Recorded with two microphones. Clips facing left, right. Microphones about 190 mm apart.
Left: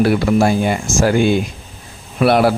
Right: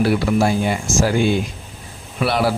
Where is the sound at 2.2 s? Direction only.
55° left (ahead or behind).